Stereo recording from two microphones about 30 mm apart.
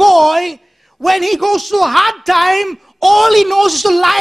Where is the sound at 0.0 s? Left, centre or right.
Centre.